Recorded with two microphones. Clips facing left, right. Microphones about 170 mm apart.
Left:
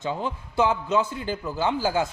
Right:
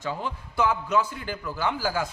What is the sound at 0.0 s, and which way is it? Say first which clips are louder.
A man's voice: left 3 dB; 25° left (ahead or behind).